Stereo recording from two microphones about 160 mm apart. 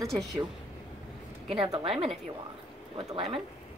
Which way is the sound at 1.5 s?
30° right (ahead or behind).